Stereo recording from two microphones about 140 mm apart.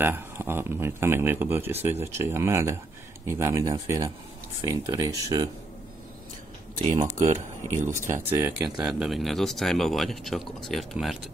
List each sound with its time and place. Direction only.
0.0 s speech: 15° right (ahead or behind)
6.9 s speech: 55° right (ahead or behind)
8.1 s speech: 15° right (ahead or behind)
8.8 s speech: centre (ahead or behind)